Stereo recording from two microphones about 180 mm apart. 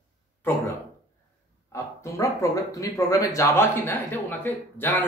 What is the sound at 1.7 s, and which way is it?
Speech, 15° left (ahead or behind).